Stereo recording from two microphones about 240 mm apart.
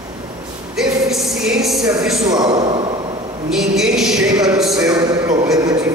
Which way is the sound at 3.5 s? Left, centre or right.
Centre.